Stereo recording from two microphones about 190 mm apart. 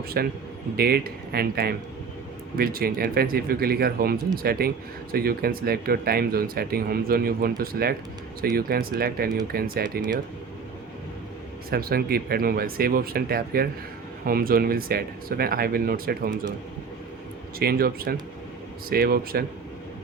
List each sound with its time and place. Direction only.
0.1 s a man's voice: 55° right (ahead or behind)
11.7 s speech: 50° right (ahead or behind)
17.6 s speech: 55° right (ahead or behind)